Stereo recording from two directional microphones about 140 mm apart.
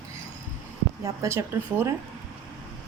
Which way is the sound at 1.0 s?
20° right (ahead or behind).